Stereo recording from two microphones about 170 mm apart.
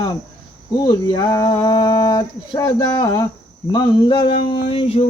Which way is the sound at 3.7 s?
25° left (ahead or behind).